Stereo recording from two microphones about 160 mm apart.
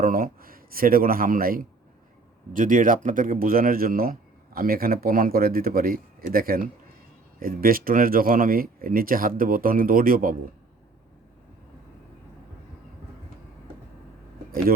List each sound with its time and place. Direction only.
0.0 s speech: 60° right (ahead or behind)